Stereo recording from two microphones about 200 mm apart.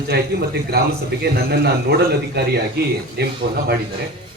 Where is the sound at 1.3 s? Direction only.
55° right (ahead or behind).